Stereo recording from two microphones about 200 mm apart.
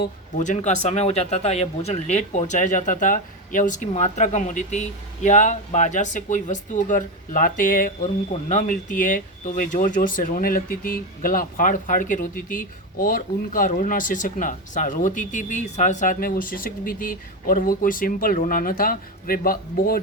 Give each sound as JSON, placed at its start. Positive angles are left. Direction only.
{"t": 0.3, "sound": "speech", "side_deg": 40}